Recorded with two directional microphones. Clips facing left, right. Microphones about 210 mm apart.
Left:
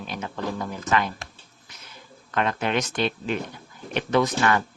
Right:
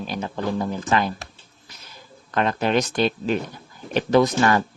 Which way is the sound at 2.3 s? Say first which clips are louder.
Right 4 dB; 35° right (ahead or behind).